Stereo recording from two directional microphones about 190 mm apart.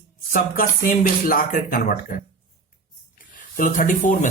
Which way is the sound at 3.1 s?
45° left (ahead or behind).